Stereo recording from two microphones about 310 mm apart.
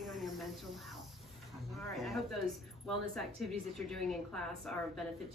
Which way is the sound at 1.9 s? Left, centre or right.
Centre.